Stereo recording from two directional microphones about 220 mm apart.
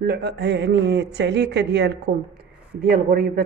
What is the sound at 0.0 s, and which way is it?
Speech, 45° right (ahead or behind).